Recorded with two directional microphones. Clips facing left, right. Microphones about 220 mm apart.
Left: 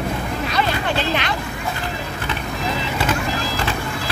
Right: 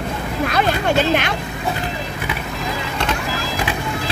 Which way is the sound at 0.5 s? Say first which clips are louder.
Right 4 dB; 50° right (ahead or behind).